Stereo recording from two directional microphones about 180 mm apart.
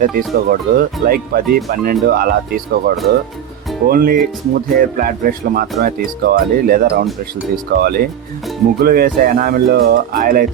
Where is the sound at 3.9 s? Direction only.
55° right (ahead or behind).